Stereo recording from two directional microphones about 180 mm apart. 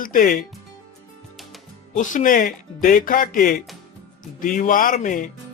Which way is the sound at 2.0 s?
45° left (ahead or behind).